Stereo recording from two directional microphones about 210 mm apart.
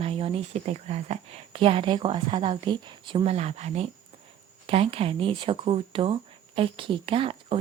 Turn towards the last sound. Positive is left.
turn(degrees=-25)  # may be behind; listen again after turning